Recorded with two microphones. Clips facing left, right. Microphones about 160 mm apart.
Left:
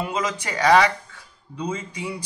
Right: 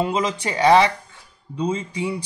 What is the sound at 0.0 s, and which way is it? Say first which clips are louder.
Speech: right 4 dB; 25° right (ahead or behind).